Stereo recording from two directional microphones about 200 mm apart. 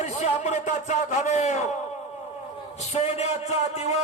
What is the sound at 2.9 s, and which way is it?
A man's voice, 35° left (ahead or behind).